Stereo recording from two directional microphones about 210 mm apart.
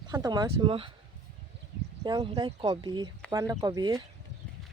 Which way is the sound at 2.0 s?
20° right (ahead or behind).